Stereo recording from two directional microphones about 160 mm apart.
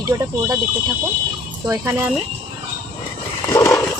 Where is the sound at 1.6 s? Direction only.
15° right (ahead or behind).